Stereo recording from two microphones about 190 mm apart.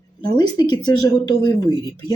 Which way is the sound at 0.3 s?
20° left (ahead or behind).